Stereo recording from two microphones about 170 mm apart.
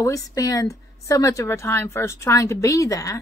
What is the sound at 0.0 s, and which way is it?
Speech, 20° left (ahead or behind).